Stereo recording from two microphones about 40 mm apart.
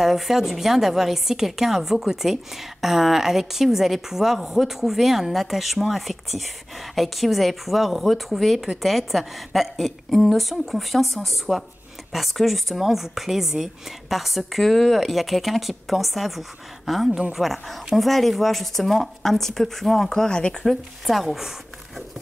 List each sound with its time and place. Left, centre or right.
0.0 s a woman's voice: centre
20.2 s speech: left
20.6 s speech: centre